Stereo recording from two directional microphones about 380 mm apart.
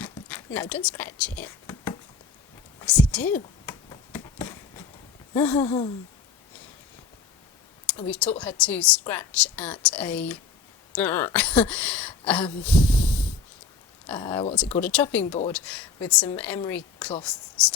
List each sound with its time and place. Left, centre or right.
0.0 s a sound: centre
5.3 s speech: centre
8.0 s a woman's voice: centre
12.6 s snort: centre
14.1 s a woman's voice: centre